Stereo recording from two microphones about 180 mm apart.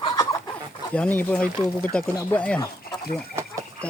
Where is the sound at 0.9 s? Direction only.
10° left (ahead or behind).